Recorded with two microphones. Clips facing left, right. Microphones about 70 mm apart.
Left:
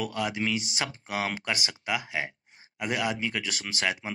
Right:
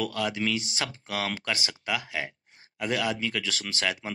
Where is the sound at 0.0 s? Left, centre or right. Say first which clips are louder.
Right 1 dB; centre.